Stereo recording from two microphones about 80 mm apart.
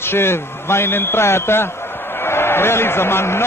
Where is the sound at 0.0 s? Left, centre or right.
Left.